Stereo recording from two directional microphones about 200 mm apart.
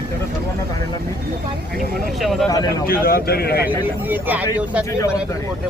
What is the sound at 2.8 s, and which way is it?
Speech, 50° left (ahead or behind).